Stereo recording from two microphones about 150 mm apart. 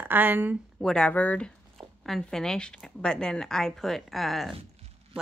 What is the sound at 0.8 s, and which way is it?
A woman's voice, 5° left (ahead or behind).